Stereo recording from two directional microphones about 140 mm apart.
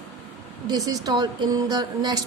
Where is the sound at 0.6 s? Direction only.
25° right (ahead or behind).